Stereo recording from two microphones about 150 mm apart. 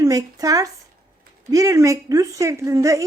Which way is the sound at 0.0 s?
25° right (ahead or behind).